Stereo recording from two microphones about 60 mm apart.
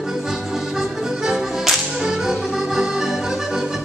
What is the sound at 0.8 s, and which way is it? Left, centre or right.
Whip, centre.